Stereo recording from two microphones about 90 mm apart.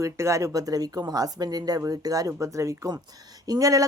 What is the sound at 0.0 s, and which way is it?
Speech, 35° right (ahead or behind).